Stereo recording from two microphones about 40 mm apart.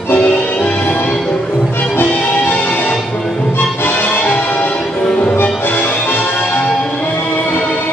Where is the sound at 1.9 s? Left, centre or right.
Left.